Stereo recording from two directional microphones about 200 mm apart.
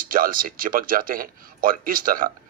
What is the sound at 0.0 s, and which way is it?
Speech, 45° right (ahead or behind).